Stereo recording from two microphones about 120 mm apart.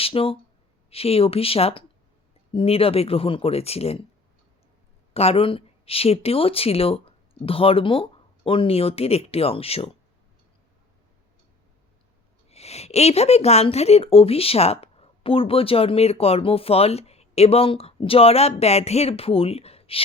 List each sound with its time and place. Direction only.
0.0 s speech: 50° left (ahead or behind)
5.1 s speech: 55° left (ahead or behind)
12.5 s speech: 60° left (ahead or behind)